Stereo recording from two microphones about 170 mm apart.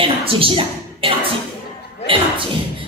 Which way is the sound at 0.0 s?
35° right (ahead or behind).